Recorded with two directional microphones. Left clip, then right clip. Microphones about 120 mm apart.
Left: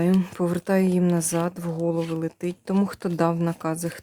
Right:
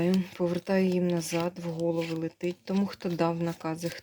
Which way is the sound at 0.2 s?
60° left (ahead or behind).